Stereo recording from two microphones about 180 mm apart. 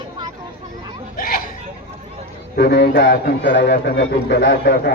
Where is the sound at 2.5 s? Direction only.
65° left (ahead or behind).